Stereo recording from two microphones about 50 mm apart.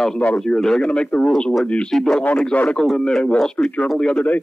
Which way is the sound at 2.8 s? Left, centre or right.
Centre.